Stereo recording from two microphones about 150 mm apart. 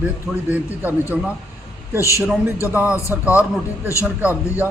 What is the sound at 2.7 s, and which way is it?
A man's voice, 10° right (ahead or behind).